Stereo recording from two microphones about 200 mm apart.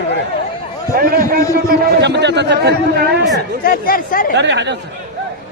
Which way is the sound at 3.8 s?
45° left (ahead or behind).